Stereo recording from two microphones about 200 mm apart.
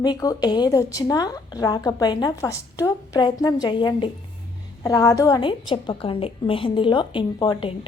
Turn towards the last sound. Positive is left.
turn(degrees=20)  # may be behind; listen again after turning